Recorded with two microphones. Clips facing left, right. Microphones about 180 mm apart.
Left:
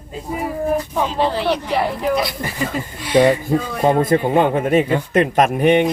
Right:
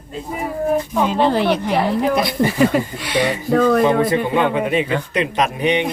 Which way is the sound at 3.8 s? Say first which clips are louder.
Left 1 dB; 45° left (ahead or behind).